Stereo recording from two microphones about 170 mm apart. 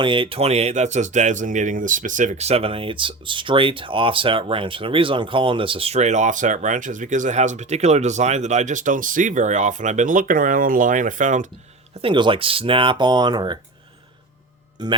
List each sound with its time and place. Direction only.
0.0 s speech: 30° right (ahead or behind); by 11.4 s 50° right (ahead or behind)
12.0 s speech: 30° right (ahead or behind)